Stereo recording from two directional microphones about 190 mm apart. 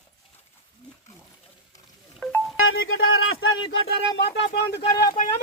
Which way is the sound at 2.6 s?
90° left.